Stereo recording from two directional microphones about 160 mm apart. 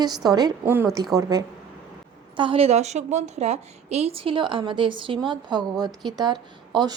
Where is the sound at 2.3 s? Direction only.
35° right (ahead or behind).